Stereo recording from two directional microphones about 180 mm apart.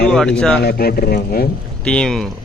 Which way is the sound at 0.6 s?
60° left (ahead or behind).